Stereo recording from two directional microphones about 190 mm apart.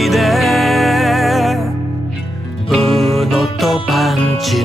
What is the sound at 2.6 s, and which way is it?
Music, centre (ahead or behind).